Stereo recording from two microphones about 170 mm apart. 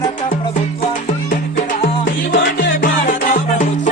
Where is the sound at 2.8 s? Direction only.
50° left (ahead or behind).